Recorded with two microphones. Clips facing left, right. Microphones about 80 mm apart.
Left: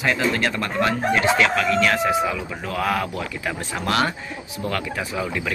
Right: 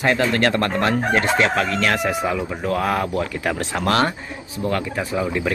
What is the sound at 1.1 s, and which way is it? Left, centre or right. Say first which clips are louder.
Speech: left 1 dB; right.